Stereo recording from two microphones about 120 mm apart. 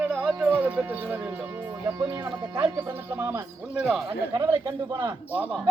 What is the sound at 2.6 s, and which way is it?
Speech, 20° right (ahead or behind).